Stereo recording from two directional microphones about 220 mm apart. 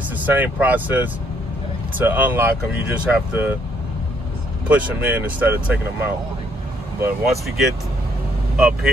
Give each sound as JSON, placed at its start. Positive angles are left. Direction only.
{"t": 0.2, "sound": "speech", "side_deg": -10}
{"t": 4.6, "sound": "speech", "side_deg": -5}